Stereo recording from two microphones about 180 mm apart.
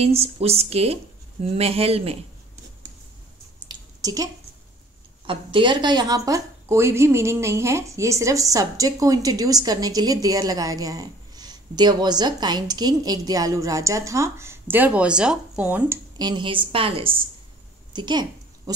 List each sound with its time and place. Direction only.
0.0 s speech: 35° right (ahead or behind)
3.6 s a sound: 20° right (ahead or behind)
5.2 s a woman's voice: 30° right (ahead or behind); by 16.0 s 10° right (ahead or behind)
16.2 s a woman's voice: 25° right (ahead or behind)